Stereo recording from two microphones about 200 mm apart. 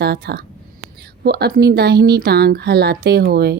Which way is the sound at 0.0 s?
55° right (ahead or behind).